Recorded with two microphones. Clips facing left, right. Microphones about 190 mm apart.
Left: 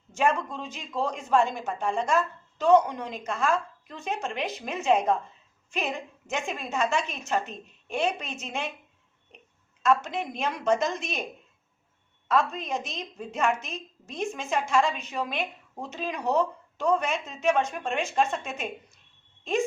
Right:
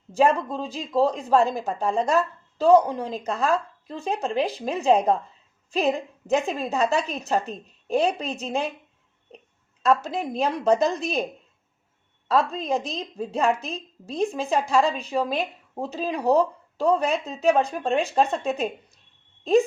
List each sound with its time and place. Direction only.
0.1 s a woman's voice: 35° right (ahead or behind)
9.8 s a woman's voice: 35° right (ahead or behind)
12.3 s a woman's voice: 35° right (ahead or behind)